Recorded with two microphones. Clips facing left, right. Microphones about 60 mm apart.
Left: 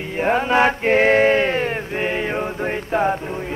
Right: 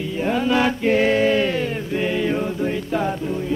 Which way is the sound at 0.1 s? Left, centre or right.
Left.